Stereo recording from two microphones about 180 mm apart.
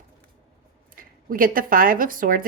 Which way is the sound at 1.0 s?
50° right (ahead or behind).